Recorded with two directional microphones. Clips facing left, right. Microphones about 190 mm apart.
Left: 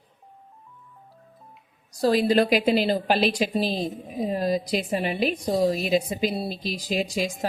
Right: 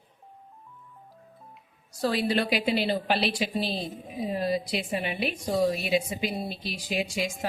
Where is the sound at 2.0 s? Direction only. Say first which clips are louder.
Left 6 dB; 40° left (ahead or behind).